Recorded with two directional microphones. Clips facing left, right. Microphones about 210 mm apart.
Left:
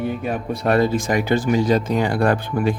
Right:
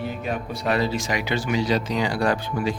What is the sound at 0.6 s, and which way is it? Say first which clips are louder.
Speech: left 6 dB; 50° left (ahead or behind).